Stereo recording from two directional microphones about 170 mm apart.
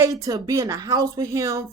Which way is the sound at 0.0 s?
20° right (ahead or behind).